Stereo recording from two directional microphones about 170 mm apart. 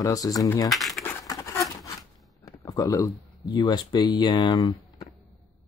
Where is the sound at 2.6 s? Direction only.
20° left (ahead or behind).